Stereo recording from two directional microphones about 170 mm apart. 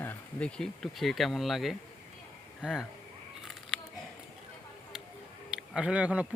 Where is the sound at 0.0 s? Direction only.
10° left (ahead or behind).